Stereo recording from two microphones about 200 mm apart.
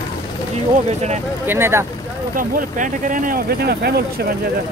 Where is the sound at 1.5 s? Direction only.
10° right (ahead or behind).